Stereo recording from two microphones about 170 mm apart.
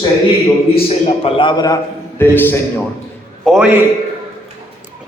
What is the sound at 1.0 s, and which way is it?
Speech, 30° left (ahead or behind).